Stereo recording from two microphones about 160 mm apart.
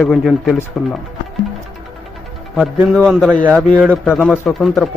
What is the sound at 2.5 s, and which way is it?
Speech, centre (ahead or behind).